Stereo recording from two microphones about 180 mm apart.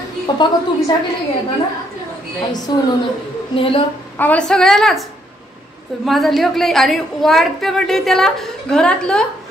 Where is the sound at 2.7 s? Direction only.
25° left (ahead or behind).